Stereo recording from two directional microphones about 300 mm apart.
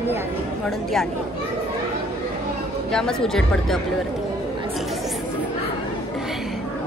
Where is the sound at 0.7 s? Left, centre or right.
Centre.